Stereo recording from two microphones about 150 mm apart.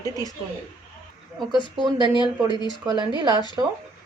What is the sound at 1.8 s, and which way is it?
Speech, 30° right (ahead or behind).